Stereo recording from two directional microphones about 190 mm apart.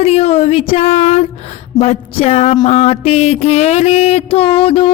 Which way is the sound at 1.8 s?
30° left (ahead or behind).